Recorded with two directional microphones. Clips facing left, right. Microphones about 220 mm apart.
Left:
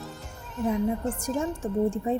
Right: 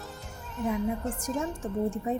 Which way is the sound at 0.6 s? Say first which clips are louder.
Left 3 dB; centre (ahead or behind).